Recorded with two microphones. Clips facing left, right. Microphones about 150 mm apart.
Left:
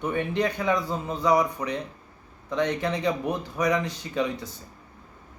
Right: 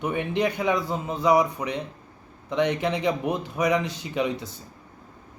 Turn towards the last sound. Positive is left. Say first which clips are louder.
# right 1 dB
turn(degrees=-15)  # may be behind; listen again after turning